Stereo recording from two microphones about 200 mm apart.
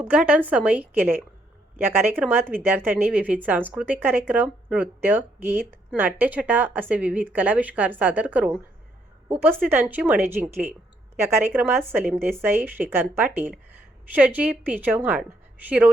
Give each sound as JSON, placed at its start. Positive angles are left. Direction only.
{"t": 0.0, "sound": "speech", "side_deg": -5}
{"t": 9.6, "sound": "speech", "side_deg": -10}